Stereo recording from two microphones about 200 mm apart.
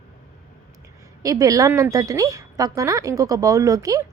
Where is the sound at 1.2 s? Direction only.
15° right (ahead or behind).